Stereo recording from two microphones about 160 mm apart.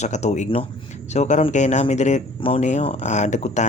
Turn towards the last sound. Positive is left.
turn(degrees=45)  # may be behind; listen again after turning